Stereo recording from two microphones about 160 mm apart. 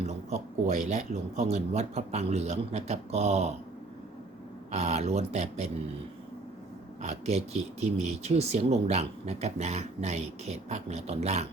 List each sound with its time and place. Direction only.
0.0 s speech: 45° right (ahead or behind)
4.7 s speech: 45° right (ahead or behind)
7.0 s speech: 45° right (ahead or behind)